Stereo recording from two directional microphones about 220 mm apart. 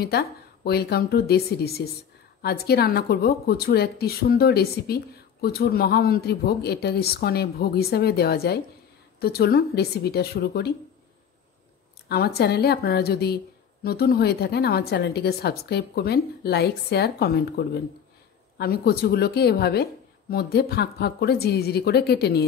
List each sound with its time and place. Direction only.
0.7 s a woman's voice: 45° left (ahead or behind)
12.4 s a woman's voice: 45° left (ahead or behind)